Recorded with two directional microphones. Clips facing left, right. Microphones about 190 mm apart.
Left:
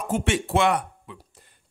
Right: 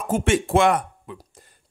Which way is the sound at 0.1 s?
50° right (ahead or behind).